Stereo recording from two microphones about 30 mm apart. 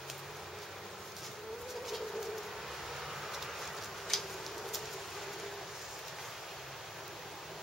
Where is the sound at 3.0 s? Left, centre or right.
Centre.